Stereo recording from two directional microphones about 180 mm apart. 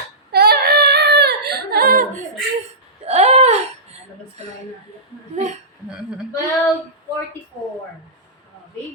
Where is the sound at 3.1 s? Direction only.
35° right (ahead or behind).